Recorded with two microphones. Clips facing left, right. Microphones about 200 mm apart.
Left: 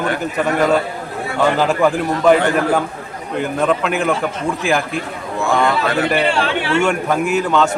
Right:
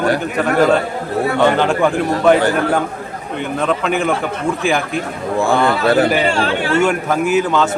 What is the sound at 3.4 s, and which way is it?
A man's voice, centre (ahead or behind).